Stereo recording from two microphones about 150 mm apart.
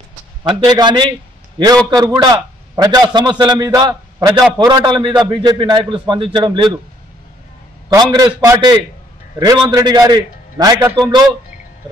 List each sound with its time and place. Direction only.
0.4 s a man's voice: 30° right (ahead or behind)
7.9 s a man's voice: 25° right (ahead or behind)